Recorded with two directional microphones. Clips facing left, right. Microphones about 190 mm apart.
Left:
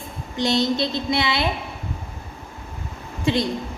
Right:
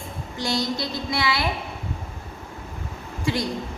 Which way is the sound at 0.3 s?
20° left (ahead or behind).